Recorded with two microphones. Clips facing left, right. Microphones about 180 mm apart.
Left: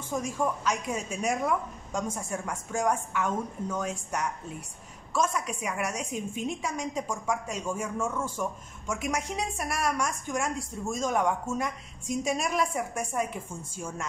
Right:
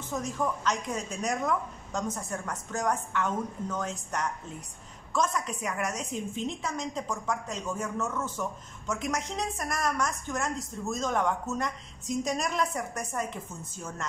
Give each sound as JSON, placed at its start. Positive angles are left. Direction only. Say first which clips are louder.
{"t": 0.1, "sound": "a woman's voice", "louder": "left 2 dB", "side_deg": 10}